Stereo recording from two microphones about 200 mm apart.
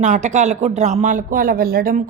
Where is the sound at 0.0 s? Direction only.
35° right (ahead or behind).